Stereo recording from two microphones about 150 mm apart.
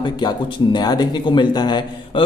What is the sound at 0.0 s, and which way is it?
Speech, 30° left (ahead or behind).